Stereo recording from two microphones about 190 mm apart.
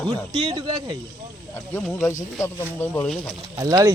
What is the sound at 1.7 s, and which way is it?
Speech, 10° left (ahead or behind).